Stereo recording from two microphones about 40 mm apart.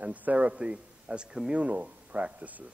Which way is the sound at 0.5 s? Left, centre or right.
Right.